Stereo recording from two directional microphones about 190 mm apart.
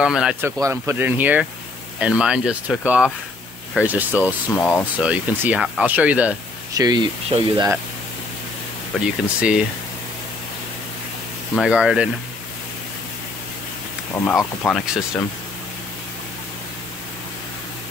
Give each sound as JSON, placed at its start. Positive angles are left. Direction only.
{"t": 0.0, "sound": "speech", "side_deg": -5}
{"t": 0.6, "sound": "speech", "side_deg": -15}
{"t": 4.6, "sound": "speech", "side_deg": 10}
{"t": 5.0, "sound": "speech", "side_deg": -5}
{"t": 6.7, "sound": "speech", "side_deg": -20}
{"t": 9.0, "sound": "speech", "side_deg": -5}
{"t": 11.5, "sound": "speech", "side_deg": -5}
{"t": 14.2, "sound": "speech", "side_deg": 10}